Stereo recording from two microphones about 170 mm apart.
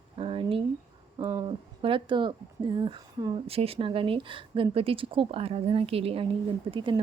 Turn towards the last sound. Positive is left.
turn(degrees=-30)  # may be behind; listen again after turning